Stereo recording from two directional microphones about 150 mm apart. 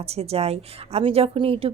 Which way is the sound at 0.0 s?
40° right (ahead or behind).